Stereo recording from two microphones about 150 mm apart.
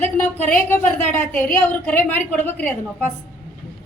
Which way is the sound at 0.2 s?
15° left (ahead or behind).